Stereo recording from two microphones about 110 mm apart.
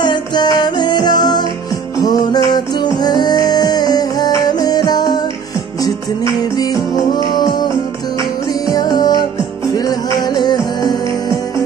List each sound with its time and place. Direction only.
0.0 s music: 45° left (ahead or behind)
6.5 s music: 35° left (ahead or behind)
10.2 s music: 40° left (ahead or behind)